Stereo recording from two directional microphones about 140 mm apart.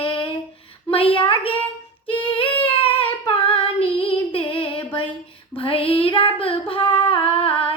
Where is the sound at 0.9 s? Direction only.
40° left (ahead or behind).